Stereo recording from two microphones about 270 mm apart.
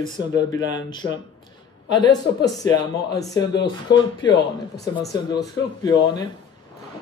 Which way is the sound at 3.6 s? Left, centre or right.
Centre.